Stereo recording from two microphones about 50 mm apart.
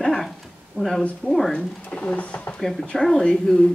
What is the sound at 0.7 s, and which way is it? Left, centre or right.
Speech, centre.